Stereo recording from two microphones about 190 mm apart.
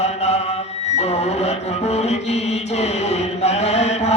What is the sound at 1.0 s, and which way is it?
Music, 35° left (ahead or behind).